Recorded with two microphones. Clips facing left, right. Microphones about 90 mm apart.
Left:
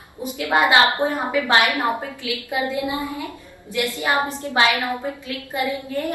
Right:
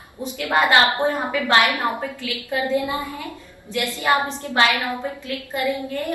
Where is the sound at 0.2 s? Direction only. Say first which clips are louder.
Left 1 dB; 15° left (ahead or behind).